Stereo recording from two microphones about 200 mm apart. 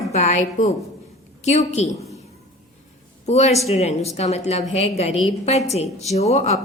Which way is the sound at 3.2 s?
35° left (ahead or behind).